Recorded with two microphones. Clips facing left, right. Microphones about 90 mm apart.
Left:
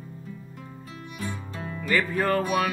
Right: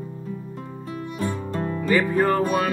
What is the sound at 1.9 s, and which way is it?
Music, 15° right (ahead or behind).